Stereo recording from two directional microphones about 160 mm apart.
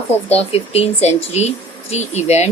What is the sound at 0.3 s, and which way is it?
Speech, 40° left (ahead or behind).